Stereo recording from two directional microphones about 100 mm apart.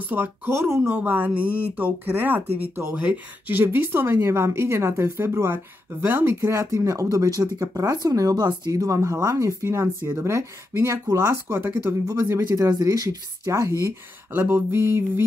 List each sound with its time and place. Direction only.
0.1 s speech: 25° right (ahead or behind)